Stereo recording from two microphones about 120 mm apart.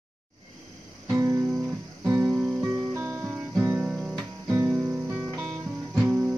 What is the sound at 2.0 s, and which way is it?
Music, 15° right (ahead or behind).